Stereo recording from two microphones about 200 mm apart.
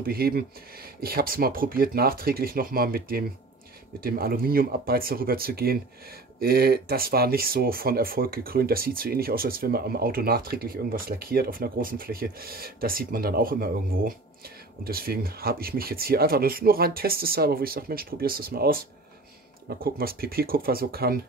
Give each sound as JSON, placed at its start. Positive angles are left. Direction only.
{"t": 0.0, "sound": "speech", "side_deg": -50}